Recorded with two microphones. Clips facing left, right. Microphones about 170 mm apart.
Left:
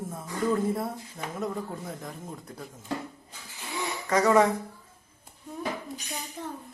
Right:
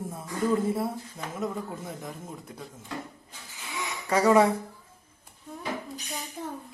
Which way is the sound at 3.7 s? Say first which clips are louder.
Left 3 dB; 35° left (ahead or behind).